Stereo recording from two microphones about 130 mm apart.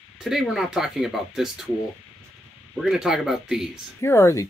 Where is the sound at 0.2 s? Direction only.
5° right (ahead or behind).